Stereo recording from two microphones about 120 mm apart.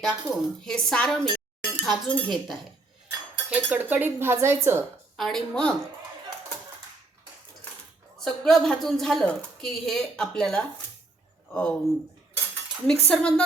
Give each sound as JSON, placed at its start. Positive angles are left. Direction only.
{"t": 0.0, "sound": "speech", "side_deg": 0}
{"t": 3.1, "sound": "speech", "side_deg": -15}
{"t": 5.1, "sound": "speech", "side_deg": 5}
{"t": 8.2, "sound": "speech", "side_deg": 5}